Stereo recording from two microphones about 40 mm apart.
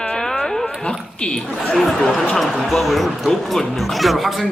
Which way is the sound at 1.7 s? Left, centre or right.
Centre.